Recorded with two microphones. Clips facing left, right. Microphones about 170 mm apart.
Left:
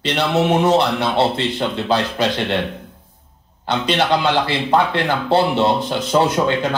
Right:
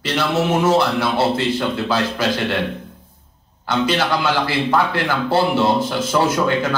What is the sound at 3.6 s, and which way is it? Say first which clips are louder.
A man's voice: left 1 dB; 20° left (ahead or behind).